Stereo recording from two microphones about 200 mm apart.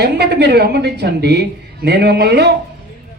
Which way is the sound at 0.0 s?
55° right (ahead or behind).